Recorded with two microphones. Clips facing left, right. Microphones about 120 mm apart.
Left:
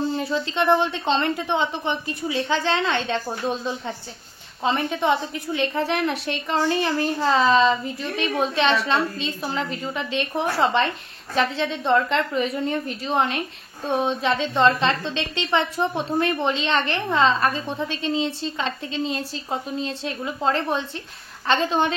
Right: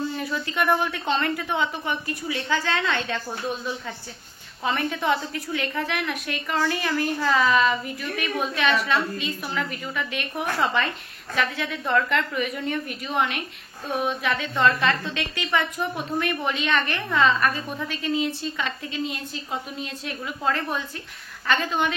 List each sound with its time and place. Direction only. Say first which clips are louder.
0.0 s a woman's voice: left 4 dB; 30° left (ahead or behind)